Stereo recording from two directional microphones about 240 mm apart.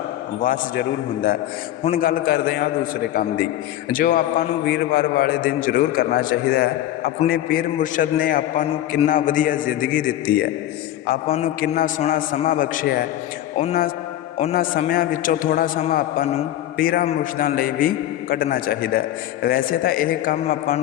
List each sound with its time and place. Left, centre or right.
0.4 s a man's voice: left
3.9 s a man's voice: left
11.6 s a man's voice: left